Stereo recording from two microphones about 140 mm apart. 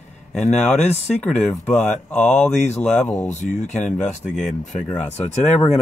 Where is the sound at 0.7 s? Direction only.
50° left (ahead or behind).